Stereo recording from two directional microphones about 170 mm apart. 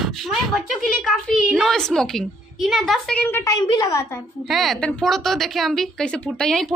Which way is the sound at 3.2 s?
15° left (ahead or behind).